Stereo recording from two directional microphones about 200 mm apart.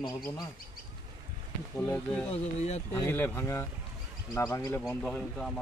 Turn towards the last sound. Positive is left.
turn(degrees=5)  # may be behind; listen again after turning